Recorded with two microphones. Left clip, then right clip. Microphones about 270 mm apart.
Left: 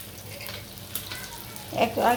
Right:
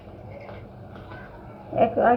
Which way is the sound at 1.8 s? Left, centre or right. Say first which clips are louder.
Right 3 dB; centre.